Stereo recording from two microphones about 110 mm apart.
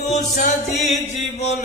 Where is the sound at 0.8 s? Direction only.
90° left.